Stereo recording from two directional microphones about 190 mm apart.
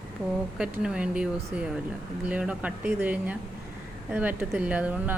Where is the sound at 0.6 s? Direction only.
5° right (ahead or behind).